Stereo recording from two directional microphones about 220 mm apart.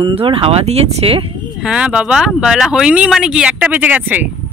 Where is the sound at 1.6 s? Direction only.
5° right (ahead or behind).